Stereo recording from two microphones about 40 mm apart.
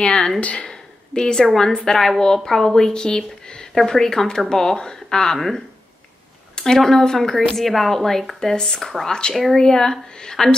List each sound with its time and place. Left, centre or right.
0.0 s speech: centre
0.4 s speech: left
0.7 s a sound: centre
1.4 s speech: centre
1.9 s speech: centre
3.2 s a sound: left
3.7 s speech: centre
6.5 s speech: centre
9.3 s speech: centre
9.6 s speech: centre